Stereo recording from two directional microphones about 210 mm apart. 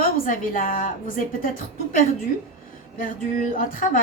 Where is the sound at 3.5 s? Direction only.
40° left (ahead or behind).